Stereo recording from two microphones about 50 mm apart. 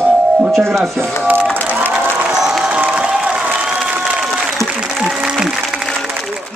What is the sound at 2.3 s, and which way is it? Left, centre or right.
Crowd, centre.